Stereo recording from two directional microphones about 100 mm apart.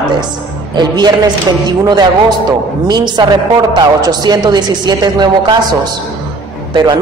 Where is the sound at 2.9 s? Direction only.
45° right (ahead or behind).